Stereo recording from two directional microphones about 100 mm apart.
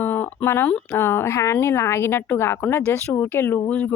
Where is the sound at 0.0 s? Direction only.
20° left (ahead or behind).